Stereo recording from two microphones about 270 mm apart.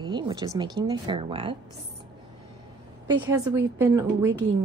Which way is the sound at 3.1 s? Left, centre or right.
Centre.